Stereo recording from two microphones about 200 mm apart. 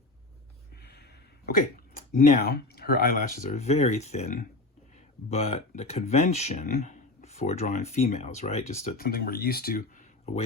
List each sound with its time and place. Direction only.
0.8 s a sound: 50° left (ahead or behind)
1.5 s speech: 45° left (ahead or behind)
3.5 s speech: 35° left (ahead or behind)
9.0 s speech: 50° left (ahead or behind)